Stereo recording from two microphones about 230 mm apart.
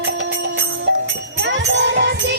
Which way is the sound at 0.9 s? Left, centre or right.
Right.